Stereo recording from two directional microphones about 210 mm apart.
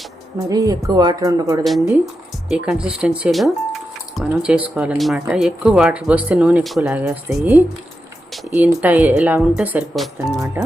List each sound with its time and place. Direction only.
0.4 s speech: 15° right (ahead or behind)
1.6 s speech: centre (ahead or behind)